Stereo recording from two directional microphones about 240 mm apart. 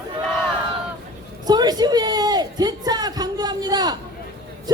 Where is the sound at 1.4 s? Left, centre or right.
Centre.